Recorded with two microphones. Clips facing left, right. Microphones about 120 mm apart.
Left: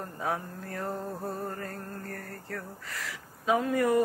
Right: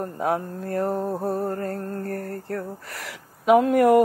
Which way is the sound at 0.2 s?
60° right (ahead or behind).